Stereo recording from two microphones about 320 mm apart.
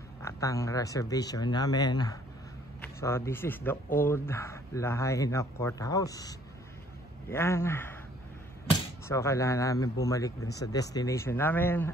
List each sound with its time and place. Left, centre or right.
0.2 s speech: centre
9.0 s speech: centre
10.4 s speech: left
10.7 s speech: centre